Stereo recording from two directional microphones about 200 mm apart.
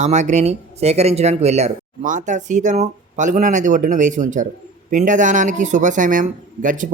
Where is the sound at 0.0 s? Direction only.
35° right (ahead or behind).